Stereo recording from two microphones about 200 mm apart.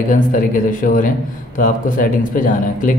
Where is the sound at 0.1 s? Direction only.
40° left (ahead or behind).